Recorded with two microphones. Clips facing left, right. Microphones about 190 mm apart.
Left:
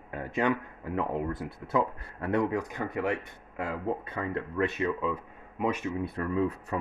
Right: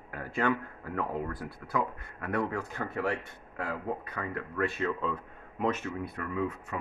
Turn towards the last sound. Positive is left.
turn(degrees=35)  # may be behind; listen again after turning